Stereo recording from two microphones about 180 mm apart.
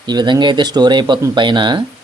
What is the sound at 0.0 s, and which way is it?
A man's voice, 25° right (ahead or behind).